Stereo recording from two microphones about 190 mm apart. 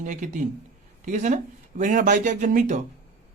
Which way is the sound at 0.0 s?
40° right (ahead or behind).